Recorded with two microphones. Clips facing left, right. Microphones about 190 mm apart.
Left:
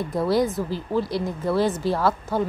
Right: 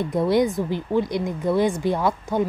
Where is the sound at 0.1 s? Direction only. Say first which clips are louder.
Right 1 dB; 20° right (ahead or behind).